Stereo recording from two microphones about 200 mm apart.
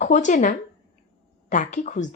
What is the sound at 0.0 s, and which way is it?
Speech, 40° left (ahead or behind).